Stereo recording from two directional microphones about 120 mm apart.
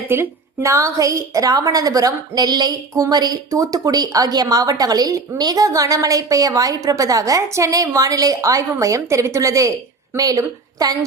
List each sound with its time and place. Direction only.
0.1 s a woman's voice: 20° right (ahead or behind)